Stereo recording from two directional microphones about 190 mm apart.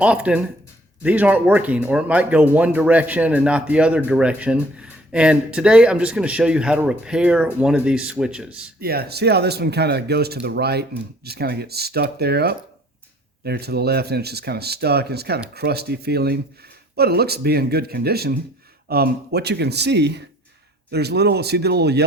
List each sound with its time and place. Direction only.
0.0 s speech: 5° right (ahead or behind)
8.8 s speech: 55° right (ahead or behind)